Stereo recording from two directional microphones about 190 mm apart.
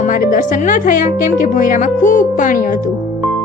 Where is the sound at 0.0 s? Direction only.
45° left (ahead or behind).